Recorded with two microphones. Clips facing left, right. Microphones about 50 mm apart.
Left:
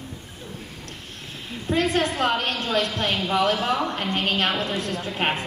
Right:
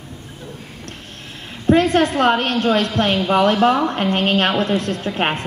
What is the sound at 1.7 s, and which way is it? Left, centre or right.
A woman's voice, right.